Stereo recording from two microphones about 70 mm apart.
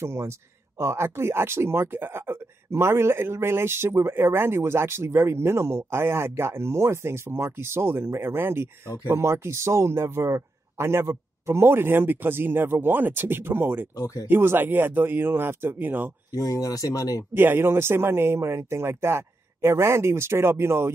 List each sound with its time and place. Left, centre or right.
0.0 s speech: right
13.9 s speech: left
14.2 s speech: right
16.3 s speech: left
17.3 s speech: right